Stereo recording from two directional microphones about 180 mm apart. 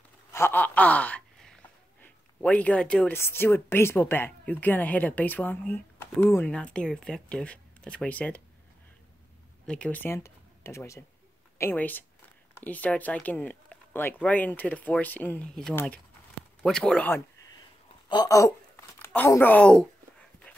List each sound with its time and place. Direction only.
0.3 s a sound: 10° left (ahead or behind)
2.0 s speech: 10° left (ahead or behind)
9.7 s speech: 5° left (ahead or behind)
18.0 s a woman's voice: 20° left (ahead or behind); by 19.9 s 5° left (ahead or behind)